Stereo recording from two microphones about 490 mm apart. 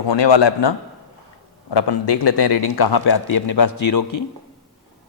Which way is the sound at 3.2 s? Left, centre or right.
Left.